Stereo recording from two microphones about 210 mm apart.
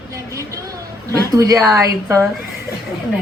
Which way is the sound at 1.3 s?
15° right (ahead or behind).